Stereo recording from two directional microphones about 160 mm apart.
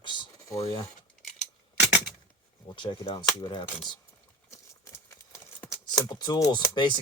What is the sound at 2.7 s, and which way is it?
Speech, 30° left (ahead or behind).